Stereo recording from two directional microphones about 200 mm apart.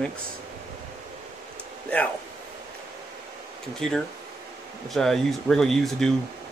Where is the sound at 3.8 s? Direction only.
Centre (ahead or behind).